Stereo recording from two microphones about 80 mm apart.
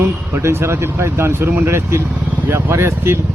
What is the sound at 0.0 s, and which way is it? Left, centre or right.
A man's voice, right.